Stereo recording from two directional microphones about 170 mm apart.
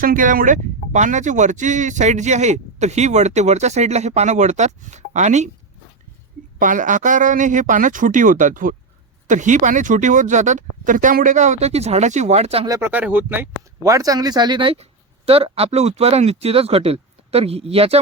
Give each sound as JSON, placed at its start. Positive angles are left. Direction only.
{"t": 0.0, "sound": "speech", "side_deg": -55}
{"t": 6.6, "sound": "speech", "side_deg": -50}
{"t": 12.6, "sound": "speech", "side_deg": -20}
{"t": 12.9, "sound": "speech", "side_deg": -10}